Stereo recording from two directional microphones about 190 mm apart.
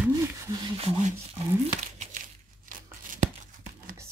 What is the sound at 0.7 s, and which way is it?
Speech, 30° right (ahead or behind).